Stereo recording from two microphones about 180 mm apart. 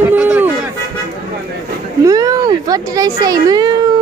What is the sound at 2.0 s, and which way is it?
Speech, 20° right (ahead or behind).